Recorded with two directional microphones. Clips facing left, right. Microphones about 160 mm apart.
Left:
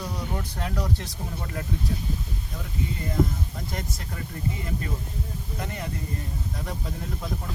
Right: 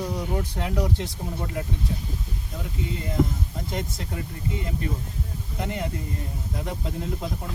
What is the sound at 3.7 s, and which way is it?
Speech, 20° right (ahead or behind).